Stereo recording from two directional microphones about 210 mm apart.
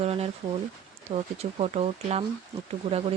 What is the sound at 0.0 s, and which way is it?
Speech, 30° right (ahead or behind).